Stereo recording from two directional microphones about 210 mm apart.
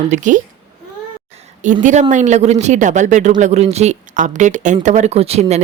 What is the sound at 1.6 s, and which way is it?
Speech, 35° right (ahead or behind).